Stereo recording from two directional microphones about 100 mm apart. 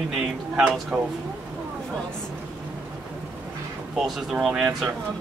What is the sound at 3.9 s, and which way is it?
Speech, centre (ahead or behind).